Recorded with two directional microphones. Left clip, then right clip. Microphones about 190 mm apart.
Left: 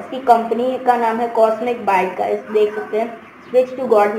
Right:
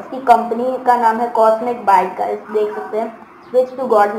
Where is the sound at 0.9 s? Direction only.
25° left (ahead or behind).